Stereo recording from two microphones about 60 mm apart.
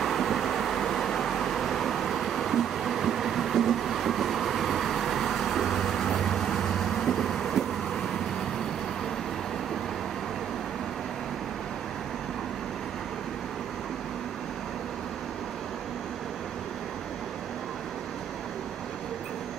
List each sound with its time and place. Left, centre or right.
0.0 s vehicle: centre